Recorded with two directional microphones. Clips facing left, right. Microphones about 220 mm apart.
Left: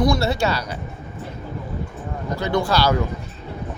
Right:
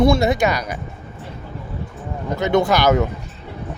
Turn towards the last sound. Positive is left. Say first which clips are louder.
# right 4 dB
turn(degrees=-20)  # may be behind; listen again after turning